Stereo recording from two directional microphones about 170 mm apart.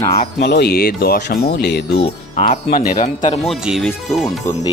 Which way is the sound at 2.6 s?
60° left (ahead or behind).